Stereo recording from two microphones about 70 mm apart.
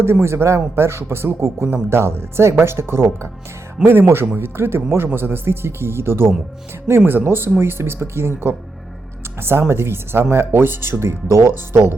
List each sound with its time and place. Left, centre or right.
0.0 s a man's voice: right